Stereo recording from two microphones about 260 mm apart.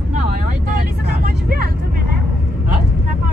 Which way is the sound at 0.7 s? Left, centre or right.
Right.